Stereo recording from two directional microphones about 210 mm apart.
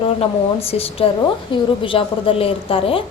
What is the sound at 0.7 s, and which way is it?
A woman's voice, 25° left (ahead or behind).